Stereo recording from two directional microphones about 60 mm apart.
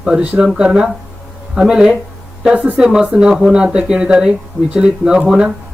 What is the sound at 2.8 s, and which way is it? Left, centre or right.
Speech, centre.